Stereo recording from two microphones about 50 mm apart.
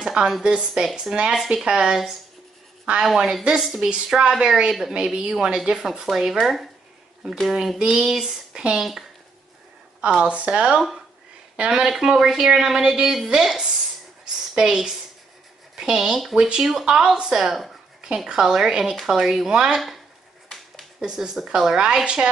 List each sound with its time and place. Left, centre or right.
0.0 s a sound: centre
0.4 s a woman's voice: centre
0.8 s speech: centre
1.1 s a woman's voice: centre
3.9 s speech: centre
4.3 s a woman's voice: centre
7.8 s a woman's voice: centre
10.2 s speech: right
11.8 s a woman's voice: centre
21.0 s a woman's voice: centre